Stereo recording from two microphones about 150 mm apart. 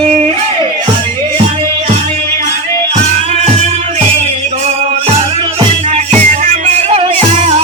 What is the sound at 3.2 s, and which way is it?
Music, 45° right (ahead or behind).